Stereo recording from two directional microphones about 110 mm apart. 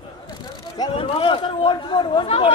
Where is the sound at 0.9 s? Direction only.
55° left (ahead or behind).